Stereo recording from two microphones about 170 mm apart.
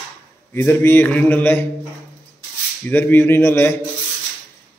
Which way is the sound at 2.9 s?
10° left (ahead or behind).